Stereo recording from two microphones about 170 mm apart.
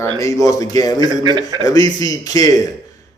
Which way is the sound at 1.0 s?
25° right (ahead or behind).